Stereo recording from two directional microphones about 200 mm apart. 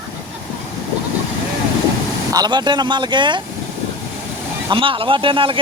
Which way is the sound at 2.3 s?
20° right (ahead or behind).